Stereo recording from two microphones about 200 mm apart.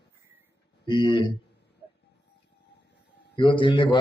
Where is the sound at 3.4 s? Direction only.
25° left (ahead or behind).